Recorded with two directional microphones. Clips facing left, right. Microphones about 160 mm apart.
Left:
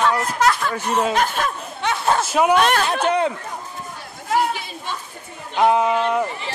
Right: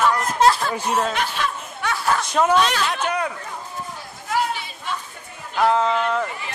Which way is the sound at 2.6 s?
55° left (ahead or behind).